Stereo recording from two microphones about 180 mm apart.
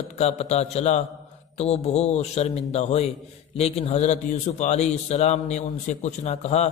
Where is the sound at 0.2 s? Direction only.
35° left (ahead or behind).